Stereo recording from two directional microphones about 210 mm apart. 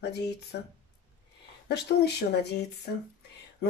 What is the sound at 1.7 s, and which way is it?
Speech, 50° left (ahead or behind).